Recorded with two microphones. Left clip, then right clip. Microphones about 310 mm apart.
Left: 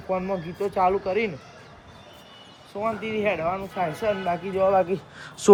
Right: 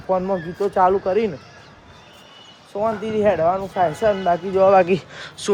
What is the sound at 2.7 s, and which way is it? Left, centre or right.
Speech, centre.